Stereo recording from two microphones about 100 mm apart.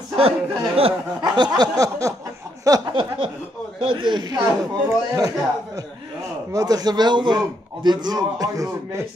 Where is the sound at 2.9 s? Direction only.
60° right (ahead or behind).